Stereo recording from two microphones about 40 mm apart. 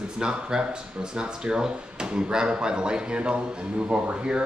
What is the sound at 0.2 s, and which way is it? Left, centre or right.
Speech, right.